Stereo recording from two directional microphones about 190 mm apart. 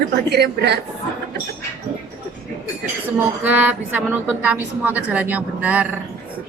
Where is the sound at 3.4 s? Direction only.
10° right (ahead or behind).